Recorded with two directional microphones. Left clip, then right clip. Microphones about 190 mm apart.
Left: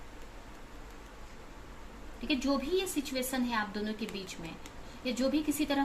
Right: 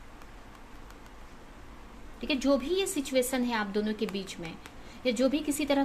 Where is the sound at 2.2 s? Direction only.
60° right (ahead or behind).